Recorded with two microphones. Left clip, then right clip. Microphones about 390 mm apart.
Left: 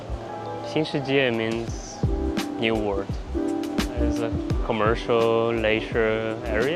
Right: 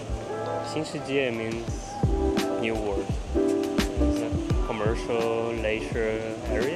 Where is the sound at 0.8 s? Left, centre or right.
Left.